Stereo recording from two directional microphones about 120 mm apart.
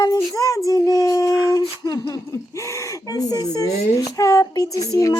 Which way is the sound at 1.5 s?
30° left (ahead or behind).